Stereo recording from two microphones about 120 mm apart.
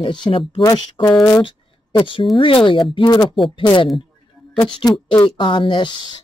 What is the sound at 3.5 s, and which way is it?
Speech, 45° left (ahead or behind).